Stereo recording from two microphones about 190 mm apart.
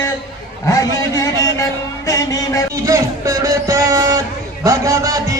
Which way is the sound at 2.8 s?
20° right (ahead or behind).